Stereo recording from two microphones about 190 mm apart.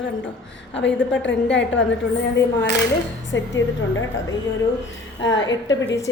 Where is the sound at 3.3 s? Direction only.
80° left.